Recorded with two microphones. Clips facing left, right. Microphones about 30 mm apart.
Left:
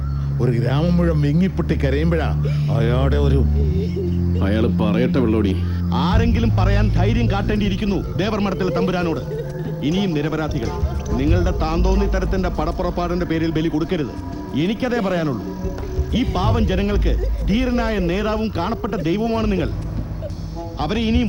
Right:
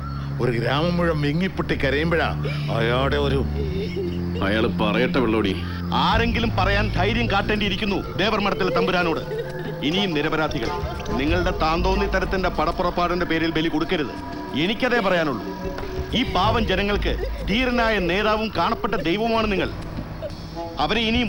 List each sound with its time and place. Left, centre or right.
0.3 s speech: right
20.7 s speech: right